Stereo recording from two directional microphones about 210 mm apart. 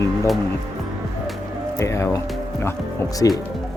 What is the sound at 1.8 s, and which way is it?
Speech, 15° left (ahead or behind).